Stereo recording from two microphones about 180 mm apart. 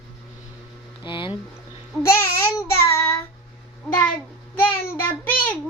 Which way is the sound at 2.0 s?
15° left (ahead or behind).